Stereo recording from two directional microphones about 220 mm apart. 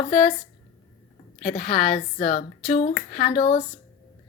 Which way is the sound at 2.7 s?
30° left (ahead or behind).